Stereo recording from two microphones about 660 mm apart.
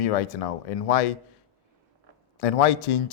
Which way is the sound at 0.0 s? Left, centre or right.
Left.